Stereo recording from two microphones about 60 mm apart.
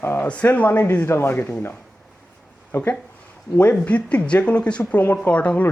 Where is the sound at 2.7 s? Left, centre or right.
Left.